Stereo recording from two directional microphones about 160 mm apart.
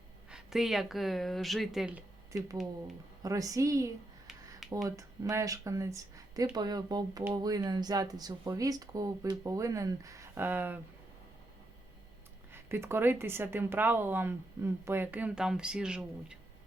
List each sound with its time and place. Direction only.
0.3 s speech: 5° right (ahead or behind)
3.2 s speech: 20° right (ahead or behind)
12.5 s speech: 15° right (ahead or behind)